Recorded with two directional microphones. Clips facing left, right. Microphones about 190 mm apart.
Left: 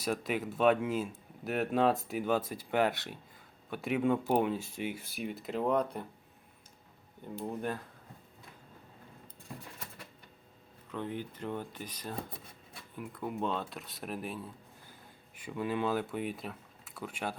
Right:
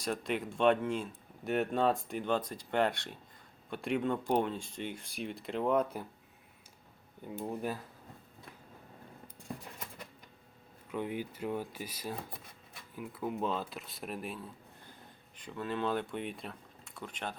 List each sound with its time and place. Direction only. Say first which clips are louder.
0.0 s speech: left 1 dB; 5° left (ahead or behind)
7.2 s speech: even; 10° right (ahead or behind)
10.9 s speech: right 1 dB; 10° right (ahead or behind); by 17.3 s 10° left (ahead or behind)